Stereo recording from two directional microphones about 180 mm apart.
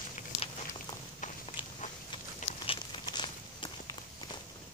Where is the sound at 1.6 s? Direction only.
30° left (ahead or behind).